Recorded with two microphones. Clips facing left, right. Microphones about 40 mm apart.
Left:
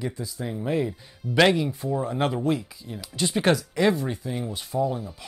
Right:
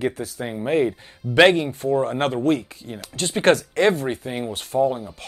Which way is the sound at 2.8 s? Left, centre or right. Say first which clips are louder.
Even; right.